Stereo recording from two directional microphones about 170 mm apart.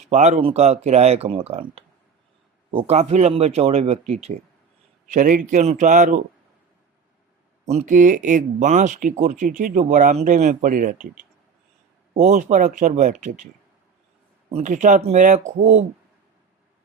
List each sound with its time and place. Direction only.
0.1 s speech: 40° right (ahead or behind)
7.7 s speech: 45° right (ahead or behind)
14.5 s speech: 45° right (ahead or behind)